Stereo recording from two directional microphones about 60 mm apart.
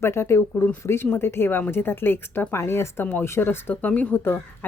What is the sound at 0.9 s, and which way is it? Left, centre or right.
Speech, left.